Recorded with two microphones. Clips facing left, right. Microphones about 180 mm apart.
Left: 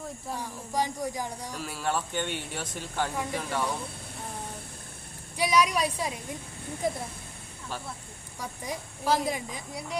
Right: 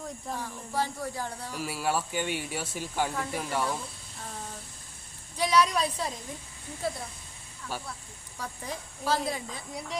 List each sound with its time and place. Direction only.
0.3 s speech: 15° left (ahead or behind)
1.5 s speech: 10° right (ahead or behind)
5.4 s speech: 10° left (ahead or behind)
8.4 s speech: 15° left (ahead or behind)